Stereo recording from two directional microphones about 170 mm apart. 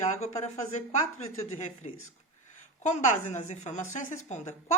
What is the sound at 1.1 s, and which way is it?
A woman's voice, 40° left (ahead or behind).